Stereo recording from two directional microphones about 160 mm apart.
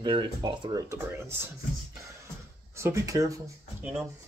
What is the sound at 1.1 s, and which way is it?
Speech, 15° right (ahead or behind).